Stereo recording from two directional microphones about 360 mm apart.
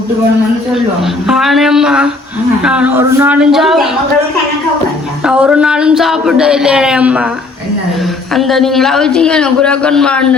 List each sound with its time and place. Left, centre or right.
1.0 s speech: centre
5.2 s speech: centre
8.3 s speech: centre